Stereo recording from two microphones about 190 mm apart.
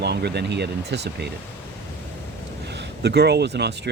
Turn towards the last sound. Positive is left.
turn(degrees=-60)  # may be behind; listen again after turning